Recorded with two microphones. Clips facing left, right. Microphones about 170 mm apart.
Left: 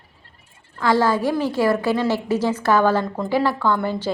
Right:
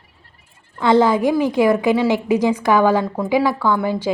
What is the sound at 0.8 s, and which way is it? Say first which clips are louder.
A woman's voice: right 4 dB; 20° right (ahead or behind).